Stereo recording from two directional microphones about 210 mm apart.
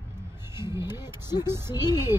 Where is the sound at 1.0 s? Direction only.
20° left (ahead or behind).